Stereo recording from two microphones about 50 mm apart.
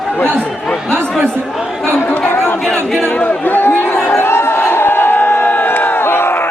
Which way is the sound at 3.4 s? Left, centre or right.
Left.